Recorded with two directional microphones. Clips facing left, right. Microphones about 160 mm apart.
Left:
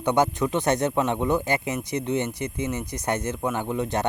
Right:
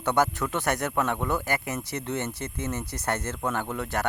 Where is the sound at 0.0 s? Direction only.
15° left (ahead or behind).